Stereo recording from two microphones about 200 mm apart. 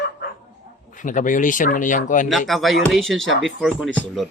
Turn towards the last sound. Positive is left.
turn(degrees=0)  # may be behind; listen again after turning